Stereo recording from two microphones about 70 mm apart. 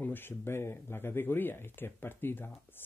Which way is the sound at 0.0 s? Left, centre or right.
Left.